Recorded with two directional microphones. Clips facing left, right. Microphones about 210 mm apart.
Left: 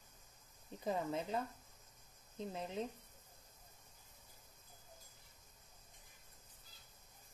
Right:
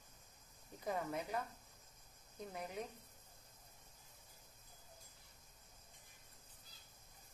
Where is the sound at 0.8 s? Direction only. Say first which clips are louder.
Left 3 dB; 25° left (ahead or behind).